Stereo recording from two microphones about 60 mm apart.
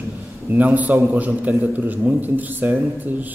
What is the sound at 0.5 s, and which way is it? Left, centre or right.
A man's voice, right.